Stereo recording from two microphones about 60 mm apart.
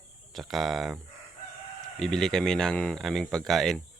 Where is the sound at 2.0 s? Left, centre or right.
Centre.